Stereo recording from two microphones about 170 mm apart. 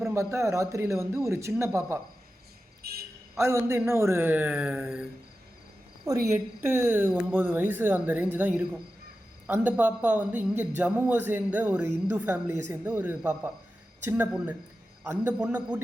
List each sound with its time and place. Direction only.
0.1 s a woman's voice: 15° right (ahead or behind)
2.8 s a sound: 65° right (ahead or behind)
3.3 s a woman's voice: 15° right (ahead or behind)
6.3 s a woman's voice: 15° right (ahead or behind)